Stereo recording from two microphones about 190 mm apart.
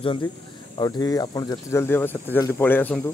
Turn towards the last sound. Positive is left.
turn(degrees=10)  # may be behind; listen again after turning